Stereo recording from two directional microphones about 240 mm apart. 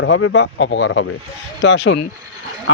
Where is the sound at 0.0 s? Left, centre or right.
Left.